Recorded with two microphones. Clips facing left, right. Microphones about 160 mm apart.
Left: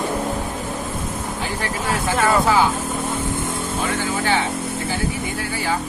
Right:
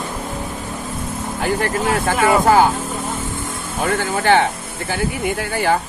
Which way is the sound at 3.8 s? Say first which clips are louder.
Right 7 dB; 60° right (ahead or behind).